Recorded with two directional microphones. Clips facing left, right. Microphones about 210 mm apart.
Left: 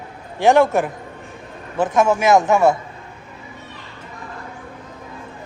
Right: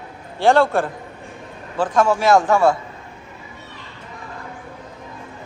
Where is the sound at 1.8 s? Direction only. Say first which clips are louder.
Left 1 dB; 20° left (ahead or behind).